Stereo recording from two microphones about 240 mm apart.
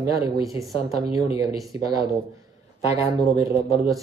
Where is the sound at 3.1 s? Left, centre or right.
Centre.